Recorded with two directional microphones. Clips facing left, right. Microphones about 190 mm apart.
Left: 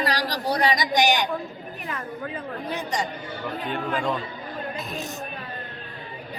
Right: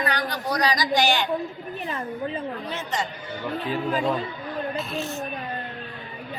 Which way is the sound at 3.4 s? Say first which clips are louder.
Right 3 dB; 5° right (ahead or behind).